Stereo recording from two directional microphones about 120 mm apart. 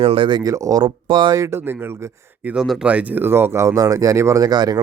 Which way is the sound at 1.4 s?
20° right (ahead or behind).